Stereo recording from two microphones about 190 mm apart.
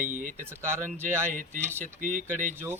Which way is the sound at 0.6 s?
10° right (ahead or behind).